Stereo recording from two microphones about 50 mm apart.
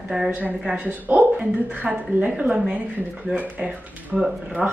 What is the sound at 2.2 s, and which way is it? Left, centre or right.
Speech, right.